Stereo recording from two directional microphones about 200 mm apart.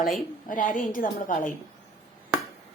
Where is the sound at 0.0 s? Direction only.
40° left (ahead or behind).